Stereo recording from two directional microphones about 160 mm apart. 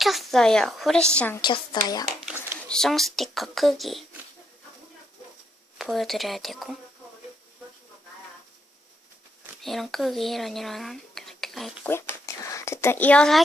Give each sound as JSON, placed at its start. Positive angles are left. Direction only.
{"t": 0.0, "sound": "a woman's voice", "side_deg": 0}
{"t": 1.4, "sound": "speech", "side_deg": 30}
{"t": 2.6, "sound": "a woman's voice", "side_deg": 5}
{"t": 5.8, "sound": "a woman's voice", "side_deg": 0}
{"t": 9.6, "sound": "speech", "side_deg": 0}
{"t": 11.9, "sound": "speech", "side_deg": 15}